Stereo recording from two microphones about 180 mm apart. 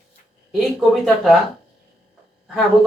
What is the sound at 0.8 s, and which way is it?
Speech, centre (ahead or behind).